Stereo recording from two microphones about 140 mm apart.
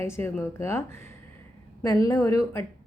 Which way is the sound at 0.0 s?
20° left (ahead or behind).